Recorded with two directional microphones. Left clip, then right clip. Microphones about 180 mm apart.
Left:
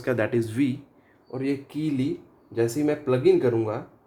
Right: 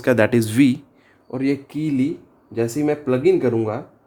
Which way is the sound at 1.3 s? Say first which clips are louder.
Right 6 dB; 45° right (ahead or behind).